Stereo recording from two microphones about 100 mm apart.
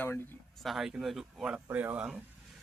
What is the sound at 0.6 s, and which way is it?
Speech, centre (ahead or behind).